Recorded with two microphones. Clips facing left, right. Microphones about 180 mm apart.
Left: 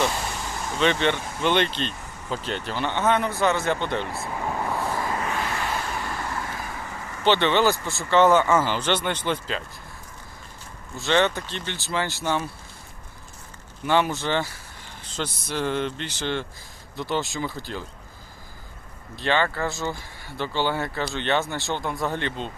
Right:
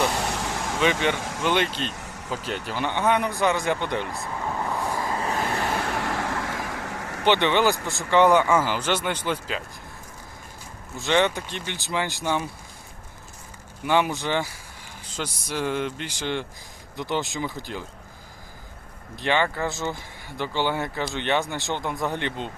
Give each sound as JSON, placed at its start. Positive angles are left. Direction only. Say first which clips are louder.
{"t": 0.2, "sound": "vehicle", "louder": "right 3 dB", "side_deg": -75}
{"t": 1.1, "sound": "speech", "louder": "right 2 dB", "side_deg": -90}
{"t": 1.5, "sound": "speech", "louder": "left 2 dB", "side_deg": -10}
{"t": 4.4, "sound": "vehicle", "louder": "left 1 dB", "side_deg": 10}
{"t": 4.8, "sound": "vehicle", "louder": "even", "side_deg": -15}
{"t": 5.2, "sound": "vehicle", "louder": "right 2 dB", "side_deg": -35}
{"t": 5.7, "sound": "vehicle", "louder": "right 3 dB", "side_deg": -65}
{"t": 7.3, "sound": "speech", "louder": "even", "side_deg": -15}
{"t": 11.0, "sound": "speech", "louder": "even", "side_deg": -15}
{"t": 13.8, "sound": "speech", "louder": "even", "side_deg": -15}
{"t": 19.1, "sound": "speech", "louder": "even", "side_deg": -15}